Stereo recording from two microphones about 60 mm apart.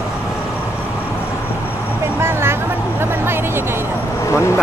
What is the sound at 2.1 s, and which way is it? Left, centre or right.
Vehicle, right.